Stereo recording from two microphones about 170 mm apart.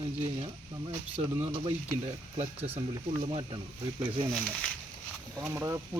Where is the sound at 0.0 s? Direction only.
30° right (ahead or behind).